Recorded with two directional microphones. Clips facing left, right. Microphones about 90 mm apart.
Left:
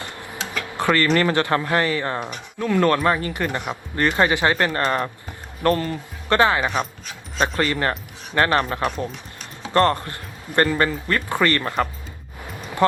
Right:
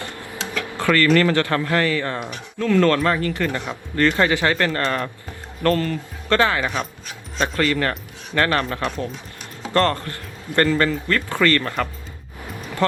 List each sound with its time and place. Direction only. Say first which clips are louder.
0.0 s speech: right 1 dB; 20° left (ahead or behind)